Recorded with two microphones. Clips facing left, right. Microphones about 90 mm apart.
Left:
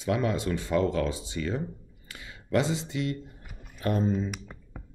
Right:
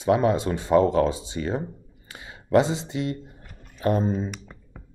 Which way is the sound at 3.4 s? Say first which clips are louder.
Right 1 dB; 5° left (ahead or behind).